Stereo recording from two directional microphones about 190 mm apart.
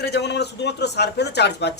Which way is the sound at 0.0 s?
60° left (ahead or behind).